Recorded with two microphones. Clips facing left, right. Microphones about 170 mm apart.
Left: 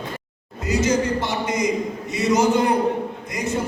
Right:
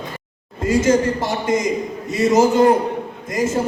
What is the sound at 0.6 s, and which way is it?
A man's voice, 50° right (ahead or behind).